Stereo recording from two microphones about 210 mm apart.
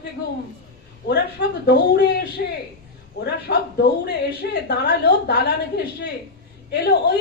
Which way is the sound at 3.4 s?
50° left (ahead or behind).